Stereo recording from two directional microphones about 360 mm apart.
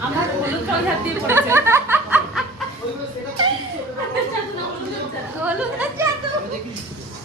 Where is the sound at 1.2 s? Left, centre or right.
Centre.